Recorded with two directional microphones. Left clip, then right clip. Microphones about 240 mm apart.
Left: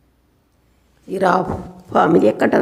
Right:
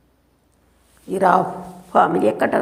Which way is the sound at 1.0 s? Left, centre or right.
Centre.